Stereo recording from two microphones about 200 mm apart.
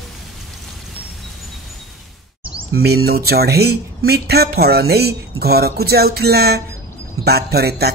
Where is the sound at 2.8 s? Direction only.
50° right (ahead or behind).